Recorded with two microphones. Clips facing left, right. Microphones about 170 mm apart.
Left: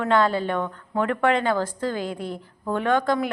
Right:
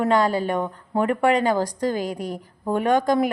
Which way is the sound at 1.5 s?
40° right (ahead or behind).